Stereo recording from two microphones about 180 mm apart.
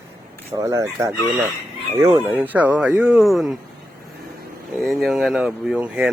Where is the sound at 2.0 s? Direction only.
25° right (ahead or behind).